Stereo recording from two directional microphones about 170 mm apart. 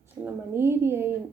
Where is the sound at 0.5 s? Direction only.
15° right (ahead or behind).